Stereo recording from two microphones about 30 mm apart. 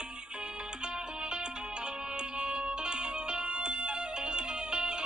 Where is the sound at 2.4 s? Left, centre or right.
Right.